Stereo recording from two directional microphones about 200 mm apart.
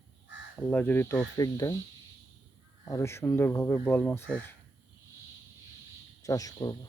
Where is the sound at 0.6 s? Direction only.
10° left (ahead or behind).